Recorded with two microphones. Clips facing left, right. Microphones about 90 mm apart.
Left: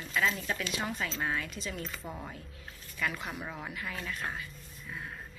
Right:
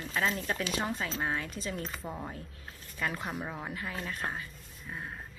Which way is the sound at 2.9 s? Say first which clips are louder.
Right 1 dB; 30° right (ahead or behind).